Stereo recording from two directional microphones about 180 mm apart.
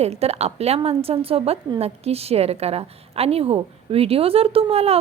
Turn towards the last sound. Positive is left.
turn(degrees=-35)  # may be behind; listen again after turning